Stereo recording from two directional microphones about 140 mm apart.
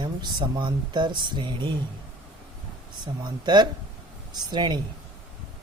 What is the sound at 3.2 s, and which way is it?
Speech, 30° right (ahead or behind).